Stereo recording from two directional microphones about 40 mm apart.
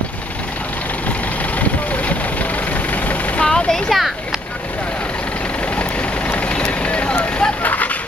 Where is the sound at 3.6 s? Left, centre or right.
Centre.